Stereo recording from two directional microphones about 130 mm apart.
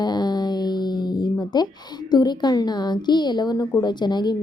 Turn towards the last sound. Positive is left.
turn(degrees=35)  # may be behind; listen again after turning